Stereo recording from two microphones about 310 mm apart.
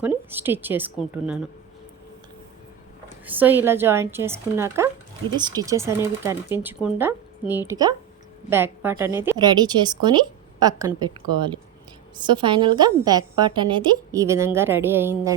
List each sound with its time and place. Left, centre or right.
0.0 s a woman's voice: centre
3.2 s a woman's voice: centre
12.2 s a woman's voice: centre